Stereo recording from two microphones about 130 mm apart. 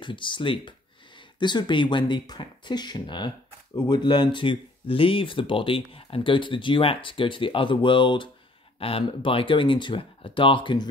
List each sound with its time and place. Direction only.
0.0 s speech: 40° left (ahead or behind)